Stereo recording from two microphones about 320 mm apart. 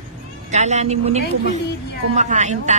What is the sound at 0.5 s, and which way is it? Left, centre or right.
A woman's voice, right.